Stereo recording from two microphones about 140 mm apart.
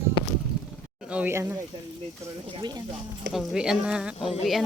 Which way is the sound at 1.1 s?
15° right (ahead or behind).